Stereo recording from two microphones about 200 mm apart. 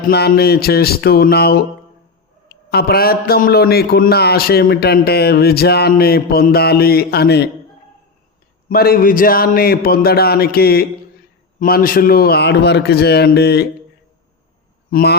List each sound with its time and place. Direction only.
0.1 s a man's voice: 55° left (ahead or behind)
8.7 s a man's voice: 50° left (ahead or behind)
14.8 s speech: 50° left (ahead or behind)